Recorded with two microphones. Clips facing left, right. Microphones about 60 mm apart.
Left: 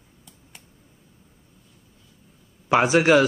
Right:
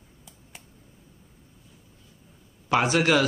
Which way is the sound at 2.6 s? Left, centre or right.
Centre.